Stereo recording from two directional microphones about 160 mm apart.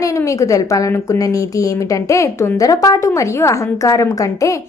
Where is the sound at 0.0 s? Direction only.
20° left (ahead or behind).